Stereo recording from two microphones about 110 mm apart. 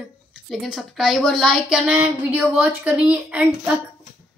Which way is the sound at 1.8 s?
15° right (ahead or behind).